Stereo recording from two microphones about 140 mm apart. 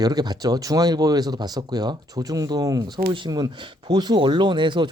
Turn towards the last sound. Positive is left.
turn(degrees=-35)  # may be behind; listen again after turning